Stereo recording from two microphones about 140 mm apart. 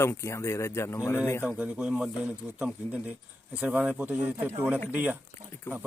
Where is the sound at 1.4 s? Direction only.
5° right (ahead or behind).